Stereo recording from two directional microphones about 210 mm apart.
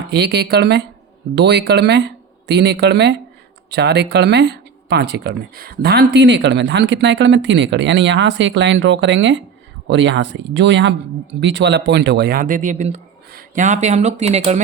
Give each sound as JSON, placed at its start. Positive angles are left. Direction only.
{"t": 0.1, "sound": "speech", "side_deg": -50}